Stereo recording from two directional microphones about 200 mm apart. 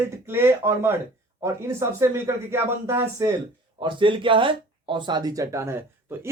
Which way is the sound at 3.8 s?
25° right (ahead or behind).